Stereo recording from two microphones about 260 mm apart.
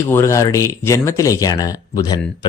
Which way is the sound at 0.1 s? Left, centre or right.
Centre.